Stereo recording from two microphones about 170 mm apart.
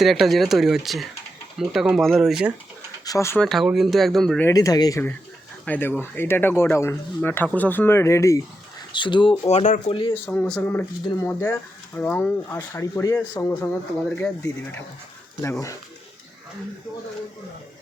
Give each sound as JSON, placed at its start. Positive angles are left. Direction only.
{"t": 0.0, "sound": "speech", "side_deg": 0}
{"t": 3.0, "sound": "speech", "side_deg": 20}
{"t": 3.4, "sound": "speech", "side_deg": 0}
{"t": 4.4, "sound": "speech", "side_deg": 20}
{"t": 8.9, "sound": "speech", "side_deg": 30}
{"t": 9.5, "sound": "speech", "side_deg": 45}
{"t": 10.2, "sound": "speech", "side_deg": 5}
{"t": 13.5, "sound": "speech", "side_deg": 5}